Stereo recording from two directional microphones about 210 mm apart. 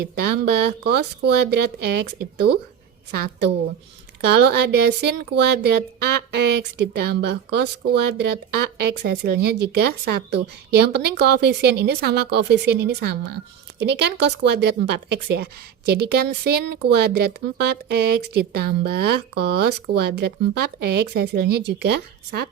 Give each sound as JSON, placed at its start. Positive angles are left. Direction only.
{"t": 0.0, "sound": "speech", "side_deg": -50}
{"t": 3.1, "sound": "speech", "side_deg": -50}